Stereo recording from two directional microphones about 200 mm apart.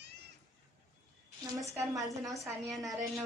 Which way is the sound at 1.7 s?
15° right (ahead or behind).